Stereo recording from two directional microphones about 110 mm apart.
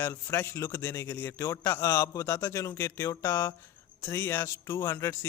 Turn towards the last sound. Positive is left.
turn(degrees=25)  # may be behind; listen again after turning